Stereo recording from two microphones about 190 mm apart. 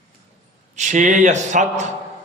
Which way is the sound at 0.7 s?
40° right (ahead or behind).